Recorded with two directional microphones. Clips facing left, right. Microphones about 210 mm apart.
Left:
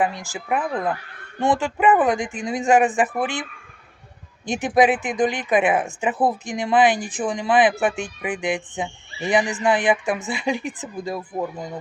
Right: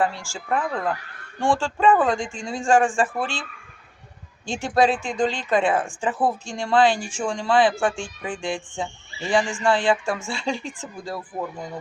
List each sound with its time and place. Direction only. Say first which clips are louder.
0.0 s speech: left 1 dB; 20° left (ahead or behind)
4.4 s speech: left 3 dB; 20° left (ahead or behind)